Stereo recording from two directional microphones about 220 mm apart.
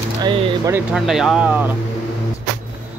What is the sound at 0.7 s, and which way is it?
Speech, centre (ahead or behind).